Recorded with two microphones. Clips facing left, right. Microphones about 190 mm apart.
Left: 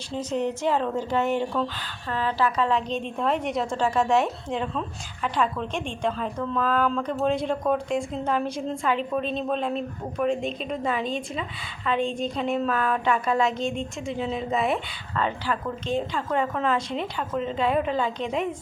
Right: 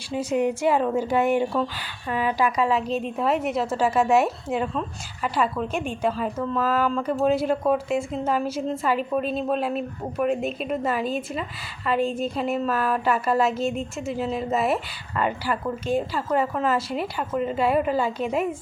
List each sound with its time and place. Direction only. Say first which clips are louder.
0.1 s speech: right 4 dB; 10° right (ahead or behind)